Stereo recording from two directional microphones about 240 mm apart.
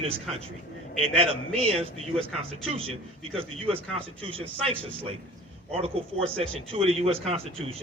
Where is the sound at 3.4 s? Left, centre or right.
Right.